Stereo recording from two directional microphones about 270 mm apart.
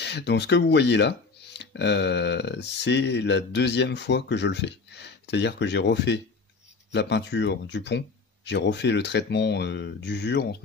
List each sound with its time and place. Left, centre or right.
0.0 s speech: left